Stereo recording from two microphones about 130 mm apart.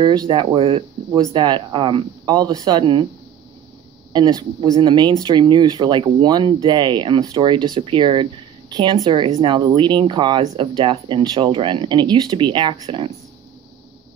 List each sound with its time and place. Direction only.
0.0 s speech: 35° right (ahead or behind)
4.1 s speech: 35° right (ahead or behind)